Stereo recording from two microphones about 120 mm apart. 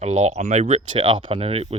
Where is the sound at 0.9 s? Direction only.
45° right (ahead or behind).